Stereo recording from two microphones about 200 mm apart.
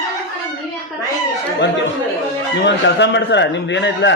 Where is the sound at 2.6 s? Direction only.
60° left (ahead or behind).